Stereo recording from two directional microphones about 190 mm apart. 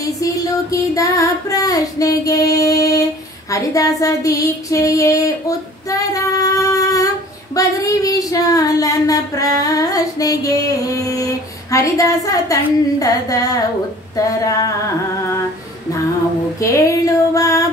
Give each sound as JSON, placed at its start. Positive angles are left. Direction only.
{"t": 0.0, "sound": "child singing", "side_deg": 15}
{"t": 3.4, "sound": "a woman's voice", "side_deg": 15}
{"t": 4.0, "sound": "female singing", "side_deg": 20}
{"t": 7.5, "sound": "a woman's voice", "side_deg": 20}
{"t": 16.5, "sound": "female singing", "side_deg": 15}